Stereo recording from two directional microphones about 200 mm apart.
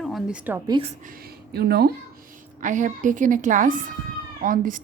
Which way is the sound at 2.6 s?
40° right (ahead or behind).